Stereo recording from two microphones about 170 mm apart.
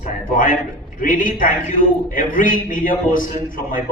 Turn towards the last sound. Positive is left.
turn(degrees=55)  # may be behind; listen again after turning